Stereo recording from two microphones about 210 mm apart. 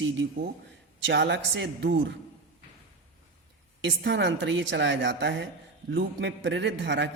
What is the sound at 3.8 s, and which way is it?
A man's voice, 55° right (ahead or behind).